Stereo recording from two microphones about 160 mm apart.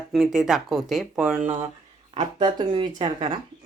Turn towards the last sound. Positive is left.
turn(degrees=-35)  # may be behind; listen again after turning